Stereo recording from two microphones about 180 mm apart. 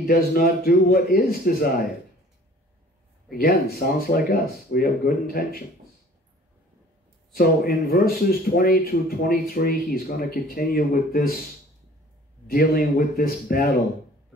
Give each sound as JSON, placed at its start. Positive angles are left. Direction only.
{"t": 0.0, "sound": "speech", "side_deg": 55}
{"t": 3.3, "sound": "speech", "side_deg": 60}
{"t": 7.3, "sound": "speech", "side_deg": 55}
{"t": 12.4, "sound": "speech", "side_deg": 55}